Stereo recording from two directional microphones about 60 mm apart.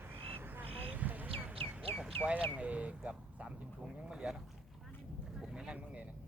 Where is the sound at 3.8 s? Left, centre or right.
Centre.